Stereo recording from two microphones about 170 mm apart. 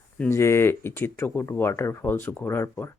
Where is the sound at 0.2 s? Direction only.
15° left (ahead or behind).